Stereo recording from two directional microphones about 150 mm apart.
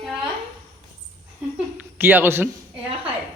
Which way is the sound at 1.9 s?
15° right (ahead or behind).